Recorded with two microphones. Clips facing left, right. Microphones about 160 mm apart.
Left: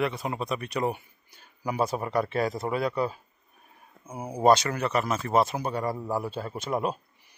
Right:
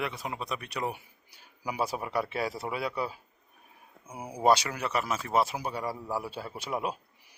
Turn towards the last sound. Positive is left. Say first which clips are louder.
# left 4 dB
turn(degrees=-10)  # may be behind; listen again after turning